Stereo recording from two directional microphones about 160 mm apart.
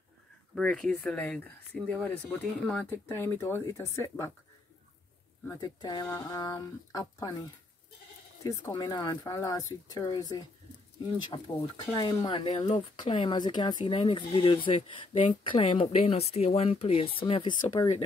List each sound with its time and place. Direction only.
0.6 s speech: 5° left (ahead or behind)
5.5 s speech: 25° left (ahead or behind)
8.5 s speech: 25° left (ahead or behind)
11.4 s speech: 25° left (ahead or behind)